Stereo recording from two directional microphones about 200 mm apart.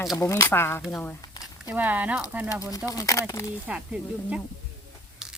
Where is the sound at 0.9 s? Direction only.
15° left (ahead or behind).